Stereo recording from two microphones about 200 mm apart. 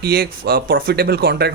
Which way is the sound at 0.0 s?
50° right (ahead or behind).